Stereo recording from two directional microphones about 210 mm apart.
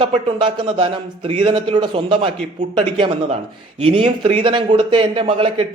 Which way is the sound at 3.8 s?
25° right (ahead or behind).